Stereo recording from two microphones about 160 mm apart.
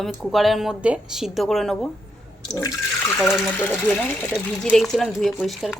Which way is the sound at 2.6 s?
15° left (ahead or behind).